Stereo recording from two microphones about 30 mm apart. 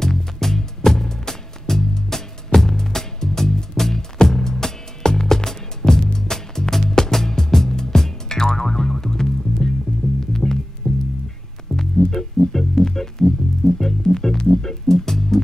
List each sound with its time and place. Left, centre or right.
0.4 s music: centre